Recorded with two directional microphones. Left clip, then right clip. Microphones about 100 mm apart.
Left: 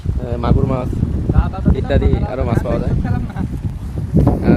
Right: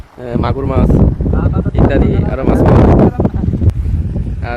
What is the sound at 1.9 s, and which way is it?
Speech, 10° left (ahead or behind).